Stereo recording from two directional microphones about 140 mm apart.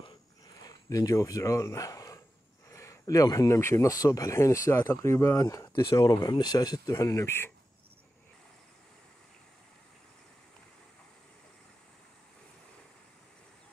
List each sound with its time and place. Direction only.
0.6 s speech: 25° left (ahead or behind)